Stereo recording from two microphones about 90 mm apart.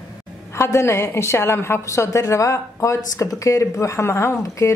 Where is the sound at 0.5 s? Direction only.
30° left (ahead or behind).